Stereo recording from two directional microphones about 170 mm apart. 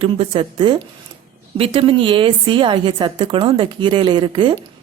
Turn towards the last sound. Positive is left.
turn(degrees=-30)  # may be behind; listen again after turning